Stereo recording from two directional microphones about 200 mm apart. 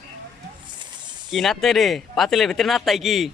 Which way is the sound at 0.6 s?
20° right (ahead or behind).